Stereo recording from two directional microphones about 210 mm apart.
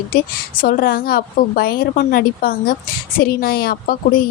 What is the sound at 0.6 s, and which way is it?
A woman's voice, 40° left (ahead or behind).